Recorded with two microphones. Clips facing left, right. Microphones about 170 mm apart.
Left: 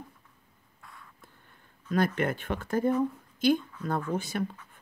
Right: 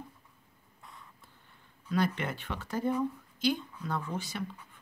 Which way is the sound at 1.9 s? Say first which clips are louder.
Left 4 dB; 50° left (ahead or behind).